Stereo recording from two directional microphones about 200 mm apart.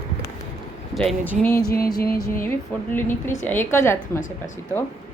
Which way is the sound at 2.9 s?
10° left (ahead or behind).